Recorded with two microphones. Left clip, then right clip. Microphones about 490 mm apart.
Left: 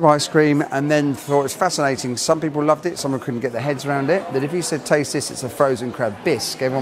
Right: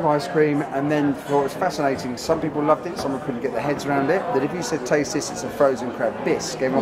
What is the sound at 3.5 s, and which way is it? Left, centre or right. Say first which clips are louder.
Speech: right 1 dB; left.